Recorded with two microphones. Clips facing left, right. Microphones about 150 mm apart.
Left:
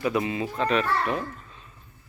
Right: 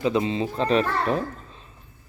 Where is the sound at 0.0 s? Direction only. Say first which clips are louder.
Right 3 dB; 25° right (ahead or behind).